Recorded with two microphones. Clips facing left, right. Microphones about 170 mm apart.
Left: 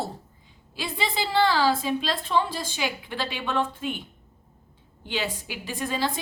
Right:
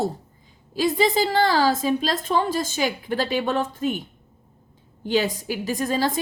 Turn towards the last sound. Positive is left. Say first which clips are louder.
# right 5 dB
turn(degrees=-40)  # may be behind; listen again after turning